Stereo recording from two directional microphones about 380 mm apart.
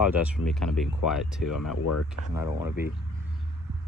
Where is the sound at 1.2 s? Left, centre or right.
Left.